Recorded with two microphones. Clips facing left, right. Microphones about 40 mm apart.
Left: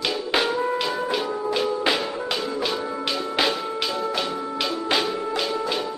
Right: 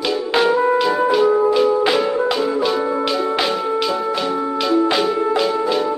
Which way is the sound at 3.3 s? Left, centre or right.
Centre.